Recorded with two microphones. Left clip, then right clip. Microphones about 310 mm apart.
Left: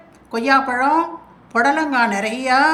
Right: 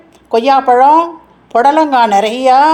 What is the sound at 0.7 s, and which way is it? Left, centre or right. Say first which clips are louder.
Speech: right 11 dB; right.